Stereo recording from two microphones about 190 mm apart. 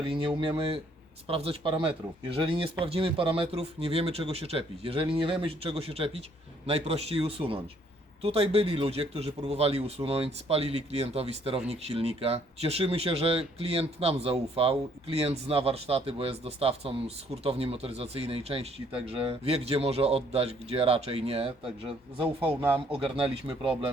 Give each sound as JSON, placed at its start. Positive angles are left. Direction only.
{"t": 0.0, "sound": "speech", "side_deg": -25}